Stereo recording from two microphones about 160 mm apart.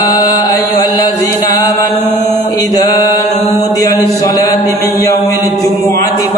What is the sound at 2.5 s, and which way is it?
Mantra, 20° left (ahead or behind).